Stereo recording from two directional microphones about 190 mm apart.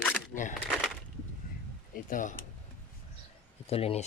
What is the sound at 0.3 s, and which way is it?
Speech, 45° left (ahead or behind).